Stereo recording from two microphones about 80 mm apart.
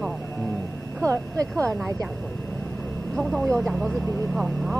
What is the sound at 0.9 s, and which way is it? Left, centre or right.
Speech, right.